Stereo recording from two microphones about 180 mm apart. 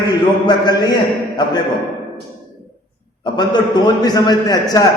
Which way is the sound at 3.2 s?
25° left (ahead or behind).